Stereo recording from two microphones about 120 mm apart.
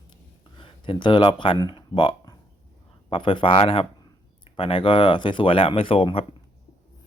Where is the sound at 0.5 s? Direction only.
45° left (ahead or behind).